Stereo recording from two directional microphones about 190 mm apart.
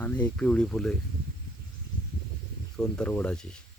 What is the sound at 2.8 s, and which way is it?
Speech, 5° left (ahead or behind).